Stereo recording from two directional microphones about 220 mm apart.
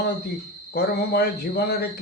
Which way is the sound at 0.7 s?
45° left (ahead or behind).